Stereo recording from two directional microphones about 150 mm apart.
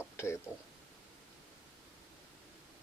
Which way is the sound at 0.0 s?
15° left (ahead or behind).